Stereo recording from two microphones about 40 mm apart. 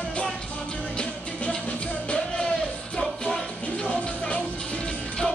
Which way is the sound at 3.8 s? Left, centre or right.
Left.